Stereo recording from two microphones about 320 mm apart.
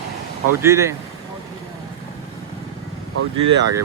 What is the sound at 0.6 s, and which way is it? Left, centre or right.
Speech, centre.